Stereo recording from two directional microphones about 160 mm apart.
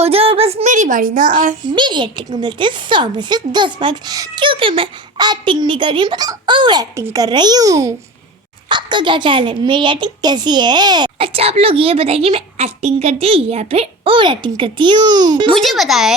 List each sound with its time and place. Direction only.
0.0 s a sound: 35° right (ahead or behind)
0.7 s speech: 55° right (ahead or behind)
1.7 s a woman's voice: 30° right (ahead or behind)
15.5 s a child's voice: centre (ahead or behind)